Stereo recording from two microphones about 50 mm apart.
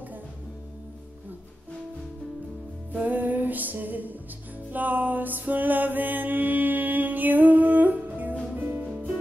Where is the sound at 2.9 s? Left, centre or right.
Right.